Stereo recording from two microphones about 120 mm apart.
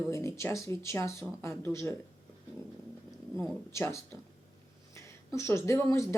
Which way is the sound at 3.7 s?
25° left (ahead or behind).